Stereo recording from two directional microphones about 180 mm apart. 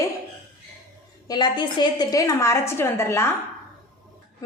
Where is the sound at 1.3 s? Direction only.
25° left (ahead or behind).